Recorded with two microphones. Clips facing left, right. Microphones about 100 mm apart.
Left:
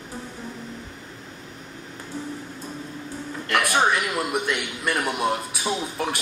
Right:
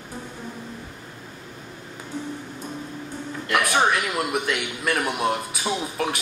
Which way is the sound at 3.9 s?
Centre (ahead or behind).